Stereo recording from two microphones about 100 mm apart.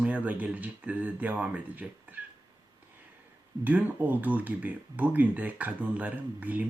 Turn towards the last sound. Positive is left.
turn(degrees=-15)  # may be behind; listen again after turning